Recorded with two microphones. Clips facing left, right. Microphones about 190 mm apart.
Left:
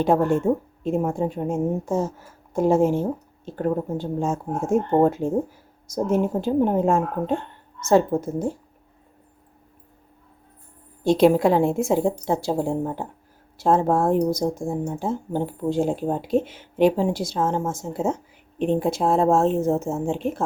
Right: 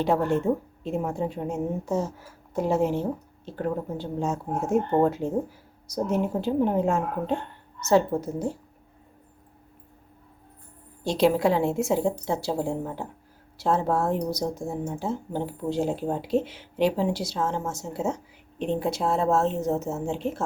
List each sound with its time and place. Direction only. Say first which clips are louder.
0.0 s speech: left 4 dB; 50° left (ahead or behind)
11.0 s speech: left 5 dB; 55° left (ahead or behind)